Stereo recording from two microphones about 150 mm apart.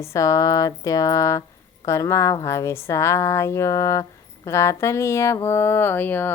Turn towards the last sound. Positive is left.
turn(degrees=15)  # may be behind; listen again after turning